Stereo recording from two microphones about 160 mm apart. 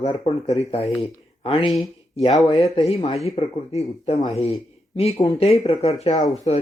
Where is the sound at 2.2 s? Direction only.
45° left (ahead or behind).